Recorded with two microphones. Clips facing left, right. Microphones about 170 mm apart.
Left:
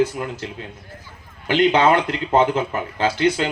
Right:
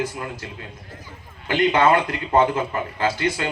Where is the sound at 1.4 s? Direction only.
20° left (ahead or behind).